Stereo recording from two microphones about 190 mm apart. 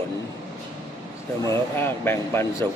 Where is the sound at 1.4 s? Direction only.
10° left (ahead or behind).